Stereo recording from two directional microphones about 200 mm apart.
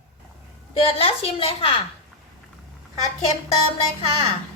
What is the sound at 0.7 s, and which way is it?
A woman's voice, 30° left (ahead or behind).